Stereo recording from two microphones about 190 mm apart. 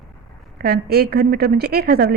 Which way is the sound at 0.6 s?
55° right (ahead or behind).